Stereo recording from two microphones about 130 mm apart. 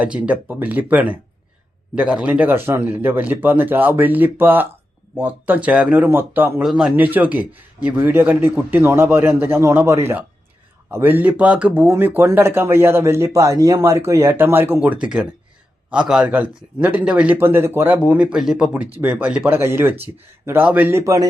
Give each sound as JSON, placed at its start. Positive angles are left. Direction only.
{"t": 0.0, "sound": "speech", "side_deg": -10}
{"t": 6.6, "sound": "speech", "side_deg": -5}
{"t": 19.5, "sound": "speech", "side_deg": -20}